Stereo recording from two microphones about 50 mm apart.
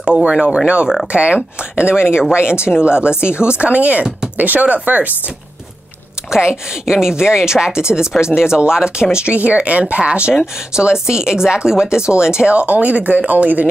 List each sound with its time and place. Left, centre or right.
0.0 s speech: centre
2.5 s speech: left
2.8 s speech: centre
6.3 s speech: centre; by 13.7 s right